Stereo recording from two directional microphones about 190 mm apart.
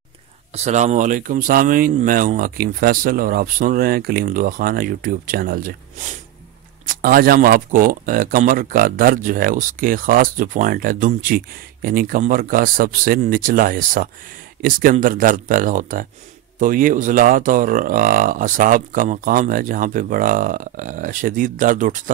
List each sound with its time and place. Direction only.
0.6 s speech: 35° right (ahead or behind)